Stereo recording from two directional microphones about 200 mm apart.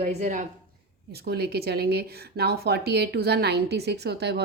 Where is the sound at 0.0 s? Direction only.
35° right (ahead or behind).